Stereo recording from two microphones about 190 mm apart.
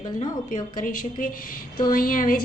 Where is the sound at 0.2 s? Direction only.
45° left (ahead or behind).